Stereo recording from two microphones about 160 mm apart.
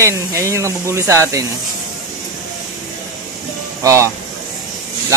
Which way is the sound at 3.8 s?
20° right (ahead or behind).